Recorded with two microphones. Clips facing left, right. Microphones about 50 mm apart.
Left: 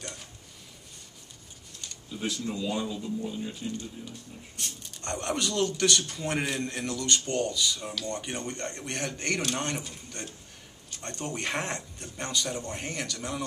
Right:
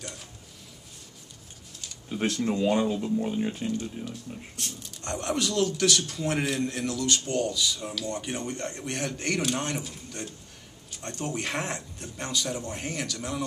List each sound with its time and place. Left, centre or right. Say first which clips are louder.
2.0 s speech: right 6 dB; right
4.0 s speech: right 5 dB; centre